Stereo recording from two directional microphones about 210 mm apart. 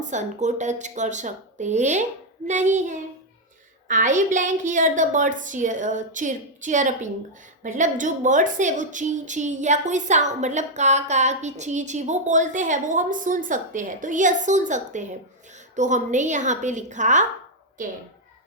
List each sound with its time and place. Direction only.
0.1 s a woman's voice: 35° right (ahead or behind)